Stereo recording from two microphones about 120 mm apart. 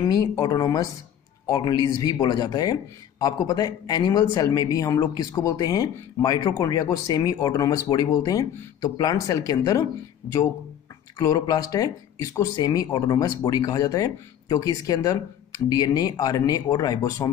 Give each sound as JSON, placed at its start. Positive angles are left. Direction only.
{"t": 0.0, "sound": "speech", "side_deg": 30}
{"t": 11.1, "sound": "speech", "side_deg": 35}